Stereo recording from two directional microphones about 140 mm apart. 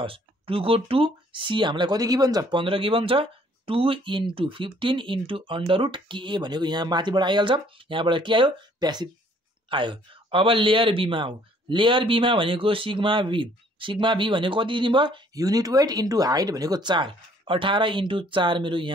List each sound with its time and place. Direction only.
0.0 s a man's voice: 40° right (ahead or behind)